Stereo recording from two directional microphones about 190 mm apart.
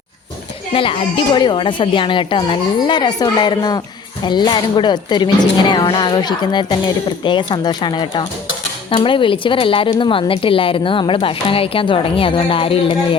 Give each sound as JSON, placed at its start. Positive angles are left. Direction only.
{"t": 0.7, "sound": "a woman's voice", "side_deg": 30}